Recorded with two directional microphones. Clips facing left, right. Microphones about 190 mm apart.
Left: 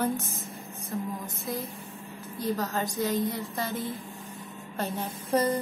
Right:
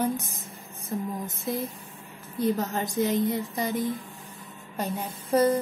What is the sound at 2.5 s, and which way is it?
A woman's voice, 20° right (ahead or behind).